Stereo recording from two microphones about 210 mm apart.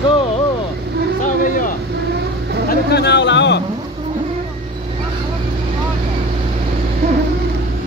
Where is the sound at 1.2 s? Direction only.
40° left (ahead or behind).